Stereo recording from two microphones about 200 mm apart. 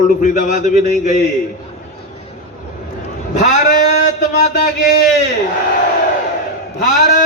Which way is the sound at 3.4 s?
40° left (ahead or behind).